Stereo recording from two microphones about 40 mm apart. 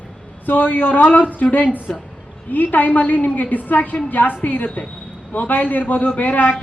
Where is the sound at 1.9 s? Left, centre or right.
Left.